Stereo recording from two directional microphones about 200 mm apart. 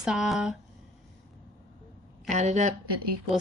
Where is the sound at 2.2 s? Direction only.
35° right (ahead or behind).